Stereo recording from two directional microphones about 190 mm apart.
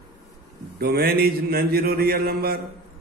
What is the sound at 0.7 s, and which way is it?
A man's voice, 55° right (ahead or behind).